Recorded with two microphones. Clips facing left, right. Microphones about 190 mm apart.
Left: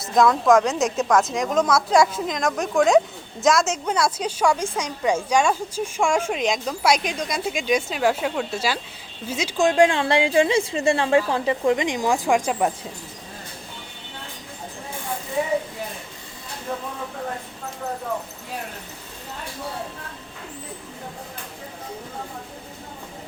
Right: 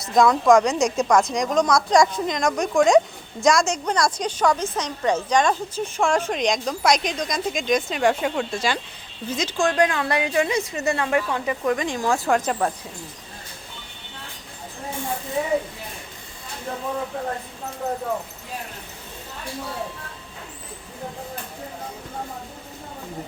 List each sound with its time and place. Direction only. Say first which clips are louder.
0.0 s a woman's voice: right 1 dB; centre (ahead or behind)
9.6 s a woman's voice: left 4 dB; 25° left (ahead or behind)